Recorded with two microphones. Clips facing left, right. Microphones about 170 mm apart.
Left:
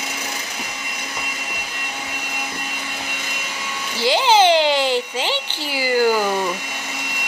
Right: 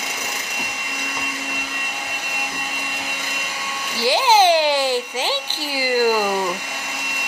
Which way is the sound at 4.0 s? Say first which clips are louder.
Even; 10° right (ahead or behind).